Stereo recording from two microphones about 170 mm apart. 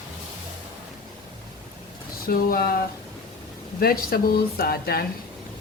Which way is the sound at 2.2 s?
60° left (ahead or behind).